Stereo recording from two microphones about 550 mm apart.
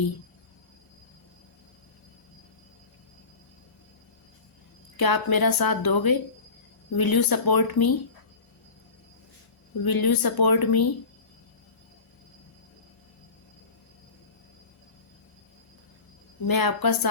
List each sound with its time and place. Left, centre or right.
4.9 s speech: left
9.8 s speech: left
16.5 s speech: left